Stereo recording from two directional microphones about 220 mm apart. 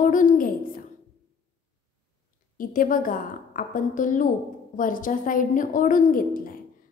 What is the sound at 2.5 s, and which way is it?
A woman's voice, 40° left (ahead or behind).